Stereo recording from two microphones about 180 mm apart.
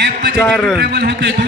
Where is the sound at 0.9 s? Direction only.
70° right (ahead or behind).